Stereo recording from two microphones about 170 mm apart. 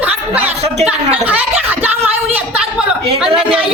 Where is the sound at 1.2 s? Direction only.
10° right (ahead or behind).